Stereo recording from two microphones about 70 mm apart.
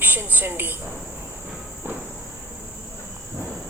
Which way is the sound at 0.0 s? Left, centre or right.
Right.